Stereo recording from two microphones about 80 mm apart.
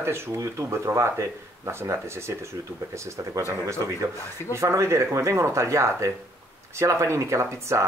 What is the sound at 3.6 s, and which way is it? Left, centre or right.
Speech, right.